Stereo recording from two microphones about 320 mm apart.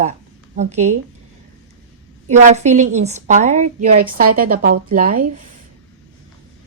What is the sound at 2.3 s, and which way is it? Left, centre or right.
A woman's voice, right.